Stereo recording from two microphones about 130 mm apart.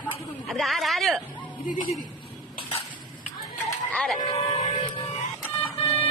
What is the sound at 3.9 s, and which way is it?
Speech, 5° left (ahead or behind).